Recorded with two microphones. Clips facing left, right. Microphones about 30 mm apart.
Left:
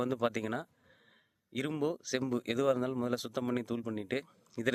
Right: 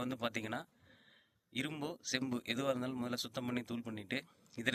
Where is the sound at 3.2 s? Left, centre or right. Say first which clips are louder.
Left 5 dB; right.